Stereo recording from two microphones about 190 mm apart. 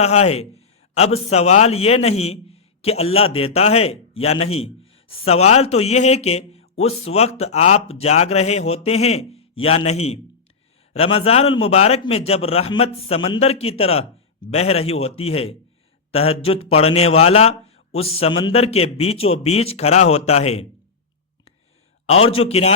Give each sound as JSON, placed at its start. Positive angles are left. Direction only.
{"t": 0.0, "sound": "a man's voice", "side_deg": 35}
{"t": 22.2, "sound": "a man's voice", "side_deg": 30}